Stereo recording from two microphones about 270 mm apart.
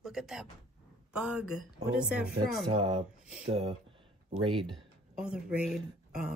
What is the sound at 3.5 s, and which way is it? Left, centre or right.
Speech, centre.